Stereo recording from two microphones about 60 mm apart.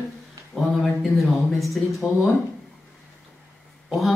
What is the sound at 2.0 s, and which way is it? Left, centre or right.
Speech, centre.